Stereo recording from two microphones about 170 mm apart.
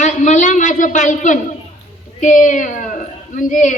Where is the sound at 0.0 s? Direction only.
45° left (ahead or behind).